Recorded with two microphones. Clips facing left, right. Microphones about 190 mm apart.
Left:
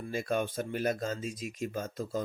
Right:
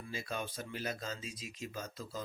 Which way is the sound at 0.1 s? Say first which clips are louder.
Left 10 dB; 55° left (ahead or behind).